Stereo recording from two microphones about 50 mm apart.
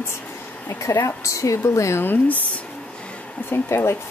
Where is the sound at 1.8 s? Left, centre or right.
Left.